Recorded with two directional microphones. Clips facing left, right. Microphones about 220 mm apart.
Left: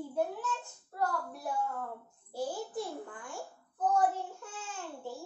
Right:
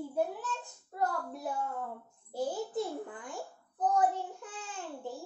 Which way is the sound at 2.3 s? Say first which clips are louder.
Right 2 dB; 20° right (ahead or behind).